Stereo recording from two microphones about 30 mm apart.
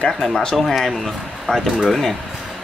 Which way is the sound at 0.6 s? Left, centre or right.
Centre.